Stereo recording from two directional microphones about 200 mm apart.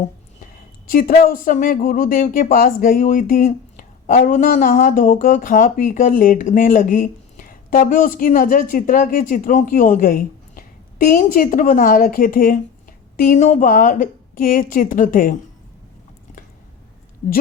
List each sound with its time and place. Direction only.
0.9 s speech: 45° left (ahead or behind)